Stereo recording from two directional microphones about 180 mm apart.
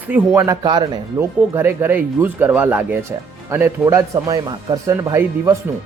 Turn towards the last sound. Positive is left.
turn(degrees=-15)  # may be behind; listen again after turning